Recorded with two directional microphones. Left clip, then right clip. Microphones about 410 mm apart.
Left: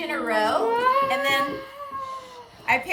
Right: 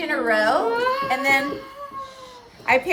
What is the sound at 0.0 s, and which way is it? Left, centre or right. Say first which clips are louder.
Speech: right 4 dB; centre.